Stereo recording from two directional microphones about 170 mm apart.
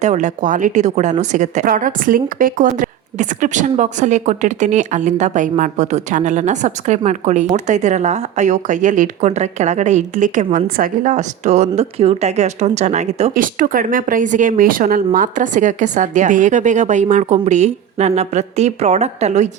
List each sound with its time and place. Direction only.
0.0 s a woman's voice: 45° right (ahead or behind)
13.3 s a woman's voice: 55° right (ahead or behind)